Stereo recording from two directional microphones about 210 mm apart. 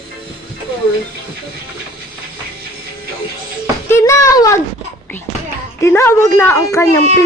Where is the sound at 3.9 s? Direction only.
15° left (ahead or behind).